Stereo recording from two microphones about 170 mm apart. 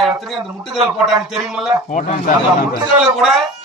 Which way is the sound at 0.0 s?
Centre (ahead or behind).